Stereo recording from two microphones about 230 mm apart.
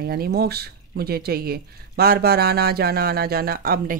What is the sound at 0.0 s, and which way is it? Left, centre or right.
Speech, right.